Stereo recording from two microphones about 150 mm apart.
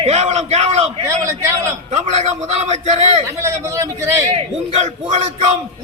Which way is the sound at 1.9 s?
50° right (ahead or behind).